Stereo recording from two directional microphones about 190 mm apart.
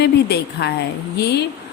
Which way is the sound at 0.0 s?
60° left (ahead or behind).